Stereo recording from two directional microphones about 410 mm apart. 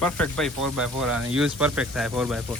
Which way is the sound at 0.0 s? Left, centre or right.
Centre.